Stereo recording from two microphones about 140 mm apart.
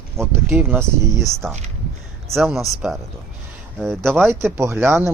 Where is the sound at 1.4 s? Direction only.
5° right (ahead or behind).